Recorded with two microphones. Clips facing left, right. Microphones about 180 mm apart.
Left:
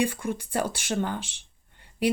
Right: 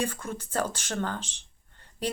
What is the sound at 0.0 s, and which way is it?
Speech, 10° left (ahead or behind).